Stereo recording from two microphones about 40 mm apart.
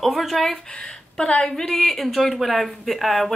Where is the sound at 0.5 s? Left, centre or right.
Left.